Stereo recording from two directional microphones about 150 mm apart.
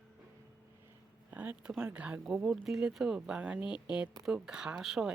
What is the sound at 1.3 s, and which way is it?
Speech, 10° right (ahead or behind).